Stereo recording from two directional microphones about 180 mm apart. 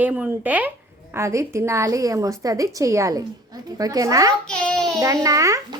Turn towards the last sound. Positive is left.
turn(degrees=-20)  # may be behind; listen again after turning